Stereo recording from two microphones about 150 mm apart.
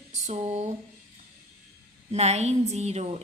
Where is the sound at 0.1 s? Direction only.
50° right (ahead or behind).